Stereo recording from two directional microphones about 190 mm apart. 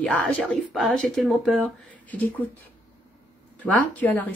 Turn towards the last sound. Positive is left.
turn(degrees=10)  # may be behind; listen again after turning